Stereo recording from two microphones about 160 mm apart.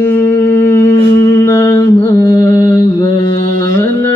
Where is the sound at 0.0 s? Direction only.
15° left (ahead or behind).